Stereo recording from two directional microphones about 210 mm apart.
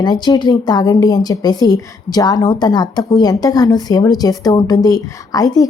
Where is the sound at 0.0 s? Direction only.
20° left (ahead or behind).